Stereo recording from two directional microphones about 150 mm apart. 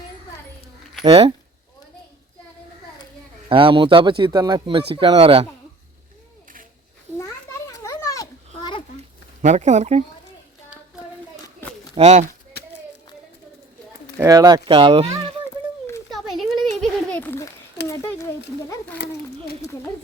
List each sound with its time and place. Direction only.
1.0 s speech: 45° right (ahead or behind)
3.5 s speech: 35° right (ahead or behind)
7.7 s children playing: 20° left (ahead or behind)
9.0 s a sound: 50° right (ahead or behind)
11.9 s speech: 45° right (ahead or behind)
14.2 s speech: 20° right (ahead or behind)
16.0 s a sound: centre (ahead or behind); by 18.3 s 20° left (ahead or behind)